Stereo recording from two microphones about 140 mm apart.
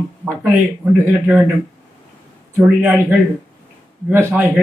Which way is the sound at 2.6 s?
10° right (ahead or behind).